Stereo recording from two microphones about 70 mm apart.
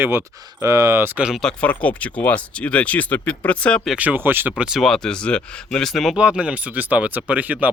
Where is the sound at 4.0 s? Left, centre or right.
Right.